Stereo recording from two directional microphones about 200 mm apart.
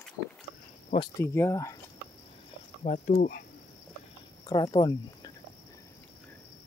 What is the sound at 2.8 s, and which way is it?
Speech, 35° left (ahead or behind).